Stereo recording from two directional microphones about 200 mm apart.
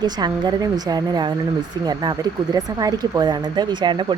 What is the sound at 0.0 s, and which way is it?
Speech, 20° right (ahead or behind).